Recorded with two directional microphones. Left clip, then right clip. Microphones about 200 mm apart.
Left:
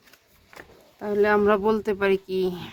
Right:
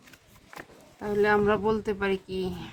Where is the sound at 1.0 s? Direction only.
40° left (ahead or behind).